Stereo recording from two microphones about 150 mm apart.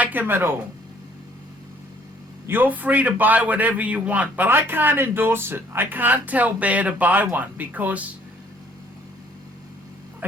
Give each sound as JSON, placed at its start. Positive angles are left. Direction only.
{"t": 0.0, "sound": "speech", "side_deg": -10}
{"t": 2.5, "sound": "a man's voice", "side_deg": -10}